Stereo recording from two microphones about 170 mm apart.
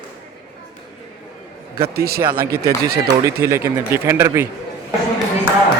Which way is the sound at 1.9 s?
65° right (ahead or behind).